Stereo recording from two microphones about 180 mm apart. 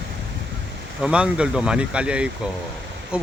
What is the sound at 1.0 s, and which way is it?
Speech, 5° right (ahead or behind).